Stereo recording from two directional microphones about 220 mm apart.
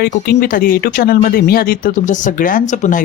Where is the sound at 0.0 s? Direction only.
40° left (ahead or behind).